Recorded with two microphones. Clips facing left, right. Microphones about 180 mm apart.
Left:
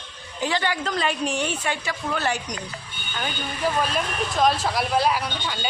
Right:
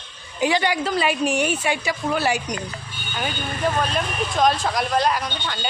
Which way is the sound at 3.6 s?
5° left (ahead or behind).